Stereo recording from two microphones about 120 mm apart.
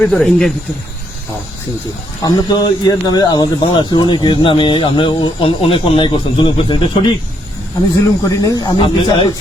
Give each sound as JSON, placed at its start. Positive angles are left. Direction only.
{"t": 0.0, "sound": "speech", "side_deg": 5}
{"t": 2.2, "sound": "speech", "side_deg": 30}
{"t": 8.4, "sound": "speech", "side_deg": 35}